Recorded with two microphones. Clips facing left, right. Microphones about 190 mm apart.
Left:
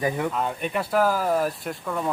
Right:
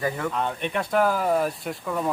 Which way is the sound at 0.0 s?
15° left (ahead or behind).